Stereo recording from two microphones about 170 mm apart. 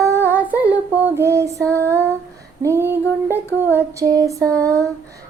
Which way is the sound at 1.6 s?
10° left (ahead or behind).